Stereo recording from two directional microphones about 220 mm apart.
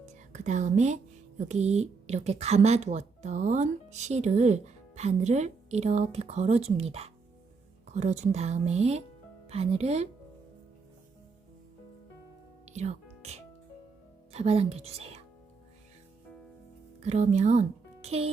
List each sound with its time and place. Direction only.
0.0 s music: 35° right (ahead or behind)
1.4 s speech: 30° right (ahead or behind)
12.6 s music: 30° right (ahead or behind)
14.3 s speech: 30° right (ahead or behind)
17.0 s speech: 30° right (ahead or behind)